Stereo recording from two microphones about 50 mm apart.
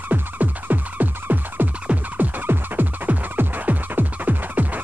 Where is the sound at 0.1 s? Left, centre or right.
Right.